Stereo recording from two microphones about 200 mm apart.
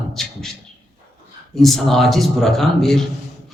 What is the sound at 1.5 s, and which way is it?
A man's voice, centre (ahead or behind).